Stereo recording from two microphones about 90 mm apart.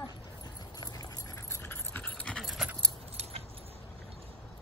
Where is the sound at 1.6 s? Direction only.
20° left (ahead or behind).